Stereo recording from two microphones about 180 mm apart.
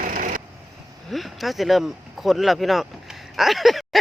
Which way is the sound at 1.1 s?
Centre (ahead or behind).